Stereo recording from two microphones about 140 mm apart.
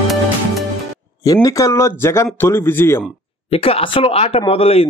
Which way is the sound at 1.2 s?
25° left (ahead or behind).